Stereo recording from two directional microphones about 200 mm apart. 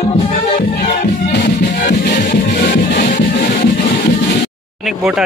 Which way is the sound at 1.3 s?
55° left (ahead or behind).